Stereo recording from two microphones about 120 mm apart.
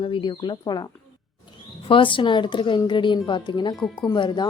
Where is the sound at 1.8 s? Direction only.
45° left (ahead or behind).